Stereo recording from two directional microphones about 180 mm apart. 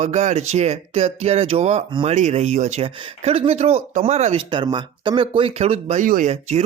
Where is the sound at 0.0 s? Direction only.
40° right (ahead or behind).